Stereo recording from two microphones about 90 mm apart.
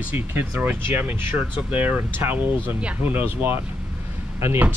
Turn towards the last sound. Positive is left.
turn(degrees=-25)  # may be behind; listen again after turning